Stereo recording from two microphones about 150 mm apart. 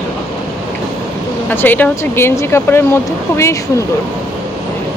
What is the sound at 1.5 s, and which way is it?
Speech, 10° left (ahead or behind).